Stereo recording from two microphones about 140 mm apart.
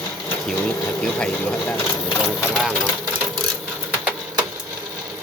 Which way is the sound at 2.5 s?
Centre (ahead or behind).